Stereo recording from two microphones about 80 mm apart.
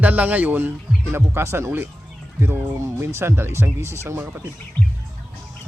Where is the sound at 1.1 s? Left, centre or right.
Right.